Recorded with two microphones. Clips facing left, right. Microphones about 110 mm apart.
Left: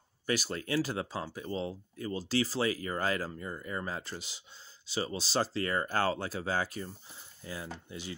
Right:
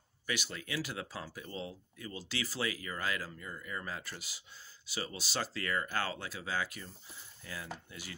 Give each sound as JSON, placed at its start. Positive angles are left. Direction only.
{"t": 0.3, "sound": "speech", "side_deg": 40}